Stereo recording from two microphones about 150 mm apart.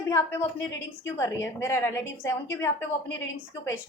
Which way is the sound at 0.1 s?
20° left (ahead or behind).